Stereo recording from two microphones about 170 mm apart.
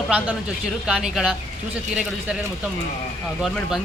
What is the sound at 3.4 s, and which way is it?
Speech, centre (ahead or behind).